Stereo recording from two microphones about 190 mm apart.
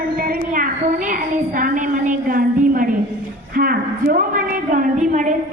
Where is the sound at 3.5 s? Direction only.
50° right (ahead or behind).